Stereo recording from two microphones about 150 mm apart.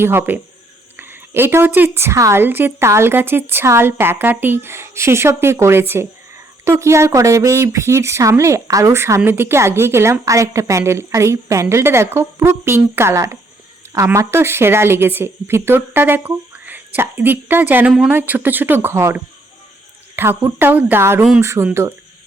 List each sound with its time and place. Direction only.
0.0 s speech: 15° right (ahead or behind)